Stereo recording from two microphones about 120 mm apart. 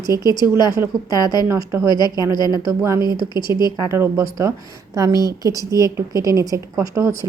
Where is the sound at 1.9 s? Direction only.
35° left (ahead or behind).